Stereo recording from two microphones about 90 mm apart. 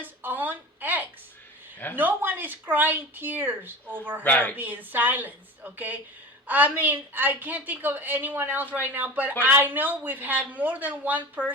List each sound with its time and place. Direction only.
0.0 s a sound: 20° right (ahead or behind)
2.0 s a woman's voice: 20° right (ahead or behind)
4.2 s speech: 20° left (ahead or behind)
4.5 s a woman's voice: 20° right (ahead or behind)